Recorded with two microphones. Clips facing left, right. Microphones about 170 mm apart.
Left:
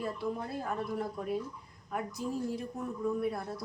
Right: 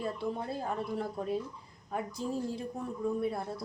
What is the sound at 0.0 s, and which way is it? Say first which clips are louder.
Speech: even; 25° right (ahead or behind).